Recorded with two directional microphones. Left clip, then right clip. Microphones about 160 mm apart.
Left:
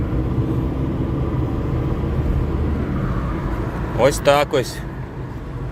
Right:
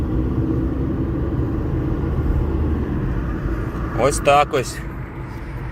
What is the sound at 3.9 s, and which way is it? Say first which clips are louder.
Speech: even; 20° left (ahead or behind).